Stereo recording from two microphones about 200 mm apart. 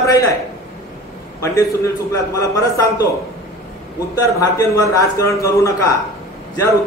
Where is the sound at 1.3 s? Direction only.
15° left (ahead or behind).